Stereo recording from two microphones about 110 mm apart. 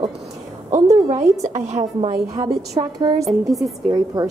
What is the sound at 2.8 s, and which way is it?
Speech, 55° right (ahead or behind).